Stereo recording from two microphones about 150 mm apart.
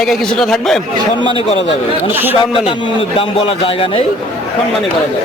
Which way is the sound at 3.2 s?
35° left (ahead or behind).